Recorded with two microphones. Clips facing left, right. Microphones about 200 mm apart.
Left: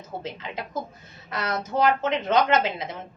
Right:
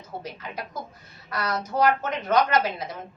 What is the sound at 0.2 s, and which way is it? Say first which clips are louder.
Speech: left 1 dB; 25° left (ahead or behind).